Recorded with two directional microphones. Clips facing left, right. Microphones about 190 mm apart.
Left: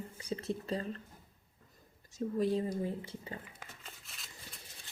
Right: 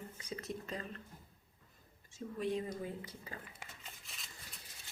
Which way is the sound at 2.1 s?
35° left (ahead or behind).